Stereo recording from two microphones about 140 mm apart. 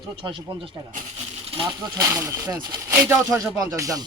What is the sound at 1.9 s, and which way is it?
Speech, 20° right (ahead or behind).